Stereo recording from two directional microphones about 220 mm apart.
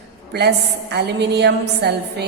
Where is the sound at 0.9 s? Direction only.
50° right (ahead or behind).